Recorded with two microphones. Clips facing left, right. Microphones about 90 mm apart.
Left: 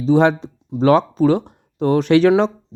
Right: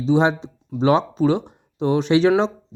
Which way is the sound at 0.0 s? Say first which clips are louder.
Left 3 dB; 50° left (ahead or behind).